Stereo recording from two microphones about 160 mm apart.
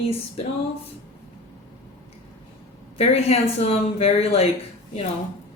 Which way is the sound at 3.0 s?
40° left (ahead or behind).